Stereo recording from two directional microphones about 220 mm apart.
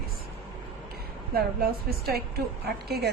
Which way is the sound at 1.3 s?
45° right (ahead or behind).